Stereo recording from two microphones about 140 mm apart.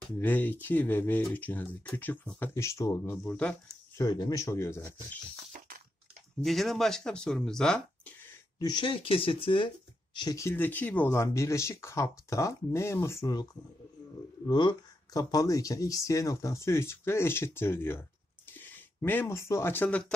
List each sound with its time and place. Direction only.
0.2 s speech: 15° left (ahead or behind)
4.0 s speech: 25° left (ahead or behind)
6.4 s speech: centre (ahead or behind)
8.5 s speech: 30° left (ahead or behind)
10.1 s speech: 25° left (ahead or behind)